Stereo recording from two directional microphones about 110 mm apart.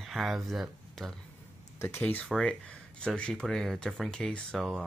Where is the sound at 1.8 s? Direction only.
20° left (ahead or behind).